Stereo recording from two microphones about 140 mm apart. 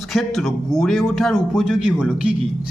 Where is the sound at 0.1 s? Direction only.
Centre (ahead or behind).